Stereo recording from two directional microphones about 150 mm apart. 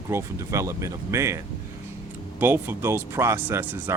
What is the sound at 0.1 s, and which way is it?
Speech, 20° right (ahead or behind).